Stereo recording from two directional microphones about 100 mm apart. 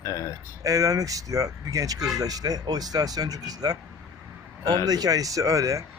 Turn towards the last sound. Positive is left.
turn(degrees=-35)  # may be behind; listen again after turning